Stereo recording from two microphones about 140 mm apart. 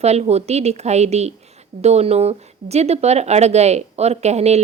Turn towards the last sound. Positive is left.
turn(degrees=-50)  # may be behind; listen again after turning